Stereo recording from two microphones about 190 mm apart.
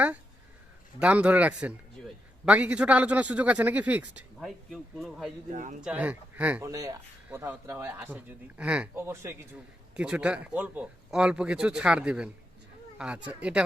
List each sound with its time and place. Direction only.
0.9 s speech: 5° right (ahead or behind)
5.5 s speech: 40° right (ahead or behind)
5.8 s speech: 10° right (ahead or behind)